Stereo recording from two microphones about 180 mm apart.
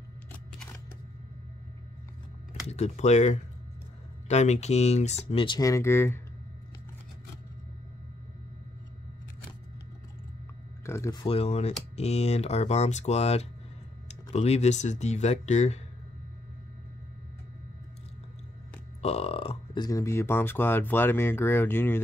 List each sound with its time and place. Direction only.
2.7 s speech: 40° left (ahead or behind); by 6.2 s 15° left (ahead or behind)
10.9 s a sound: 20° left (ahead or behind)
11.2 s speech: 35° left (ahead or behind)
19.0 s speech: 35° left (ahead or behind); by 22.0 s 10° left (ahead or behind)